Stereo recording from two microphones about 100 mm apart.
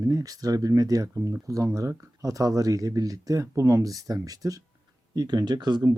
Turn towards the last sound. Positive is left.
turn(degrees=-40)  # may be behind; listen again after turning